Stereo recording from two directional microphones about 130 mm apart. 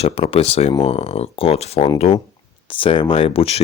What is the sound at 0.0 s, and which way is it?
Speech, 50° left (ahead or behind).